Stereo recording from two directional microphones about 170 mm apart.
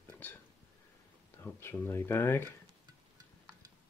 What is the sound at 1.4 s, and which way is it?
Speech, 15° left (ahead or behind).